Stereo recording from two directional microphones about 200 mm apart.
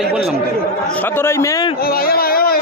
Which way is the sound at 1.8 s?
50° left (ahead or behind).